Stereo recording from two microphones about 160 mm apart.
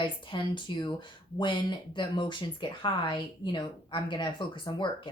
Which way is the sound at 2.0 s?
30° left (ahead or behind).